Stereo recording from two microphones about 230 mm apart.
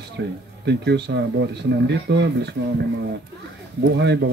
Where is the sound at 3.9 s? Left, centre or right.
Right.